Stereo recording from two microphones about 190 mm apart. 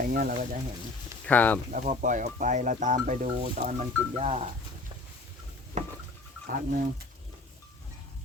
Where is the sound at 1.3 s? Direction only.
10° left (ahead or behind).